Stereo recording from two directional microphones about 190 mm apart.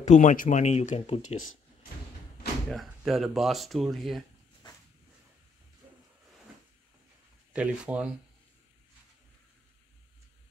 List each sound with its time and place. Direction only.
0.0 s speech: 40° left (ahead or behind)
1.3 s speech: 90° left
2.7 s speech: centre (ahead or behind)
7.5 s speech: 5° right (ahead or behind)